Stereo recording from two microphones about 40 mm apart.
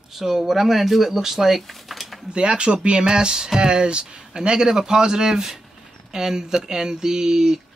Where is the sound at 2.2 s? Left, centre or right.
Right.